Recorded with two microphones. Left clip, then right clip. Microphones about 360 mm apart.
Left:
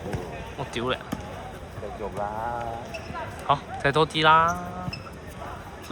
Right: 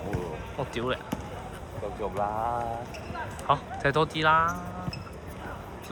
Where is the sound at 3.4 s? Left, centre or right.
Centre.